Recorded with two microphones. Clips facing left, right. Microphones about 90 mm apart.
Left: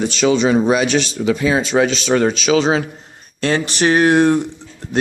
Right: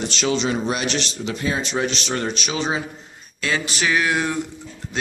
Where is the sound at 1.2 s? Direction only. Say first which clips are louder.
Left 10 dB; 90° left.